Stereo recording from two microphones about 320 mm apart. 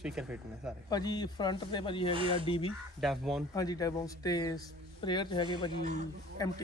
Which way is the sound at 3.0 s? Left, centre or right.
Centre.